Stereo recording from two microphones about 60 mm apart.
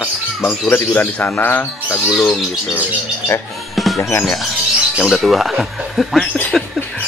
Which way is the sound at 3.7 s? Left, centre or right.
Centre.